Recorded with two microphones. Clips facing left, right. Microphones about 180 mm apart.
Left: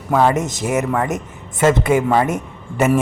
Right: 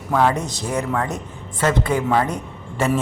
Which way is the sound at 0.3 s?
20° left (ahead or behind).